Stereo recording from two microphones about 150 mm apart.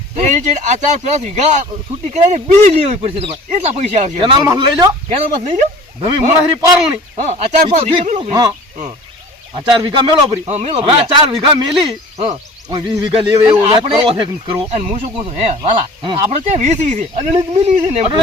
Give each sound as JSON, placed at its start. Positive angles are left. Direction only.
{"t": 0.2, "sound": "speech", "side_deg": -50}
{"t": 4.2, "sound": "speech", "side_deg": -30}
{"t": 5.0, "sound": "speech", "side_deg": -45}
{"t": 6.0, "sound": "speech", "side_deg": -30}
{"t": 7.2, "sound": "speech", "side_deg": -50}
{"t": 8.3, "sound": "speech", "side_deg": -25}
{"t": 9.7, "sound": "speech", "side_deg": -30}
{"t": 10.4, "sound": "speech", "side_deg": -45}
{"t": 12.1, "sound": "hoot", "side_deg": -50}
{"t": 12.7, "sound": "speech", "side_deg": -25}
{"t": 13.5, "sound": "speech", "side_deg": -40}
{"t": 16.0, "sound": "speech", "side_deg": -25}
{"t": 16.3, "sound": "speech", "side_deg": -45}